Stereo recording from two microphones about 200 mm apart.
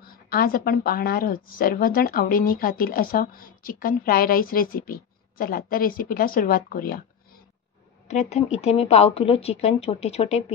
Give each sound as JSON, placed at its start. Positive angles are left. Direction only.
{"t": 0.0, "sound": "a woman's voice", "side_deg": 50}
{"t": 8.1, "sound": "speech", "side_deg": 35}